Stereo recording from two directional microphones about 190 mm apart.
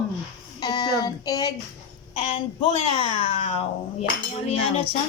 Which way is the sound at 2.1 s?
30° left (ahead or behind).